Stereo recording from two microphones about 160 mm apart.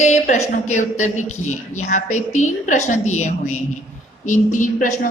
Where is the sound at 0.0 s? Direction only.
45° left (ahead or behind).